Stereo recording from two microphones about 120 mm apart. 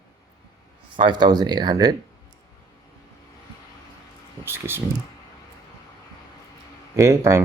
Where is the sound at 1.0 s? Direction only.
35° right (ahead or behind).